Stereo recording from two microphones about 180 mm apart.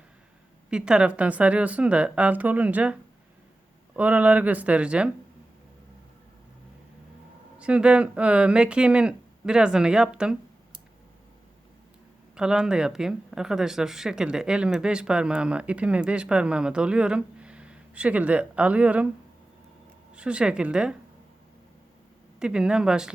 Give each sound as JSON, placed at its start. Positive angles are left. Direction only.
{"t": 0.7, "sound": "speech", "side_deg": -5}
{"t": 7.6, "sound": "speech", "side_deg": -5}
{"t": 12.4, "sound": "speech", "side_deg": -5}
{"t": 20.1, "sound": "speech", "side_deg": -5}
{"t": 22.4, "sound": "speech", "side_deg": -5}